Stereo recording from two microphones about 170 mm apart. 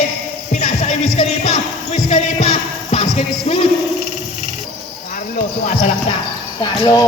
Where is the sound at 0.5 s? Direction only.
45° left (ahead or behind).